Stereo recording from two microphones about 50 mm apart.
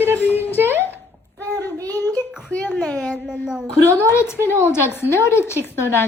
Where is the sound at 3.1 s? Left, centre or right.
Centre.